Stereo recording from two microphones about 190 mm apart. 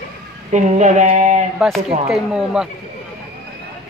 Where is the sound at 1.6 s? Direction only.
Centre (ahead or behind).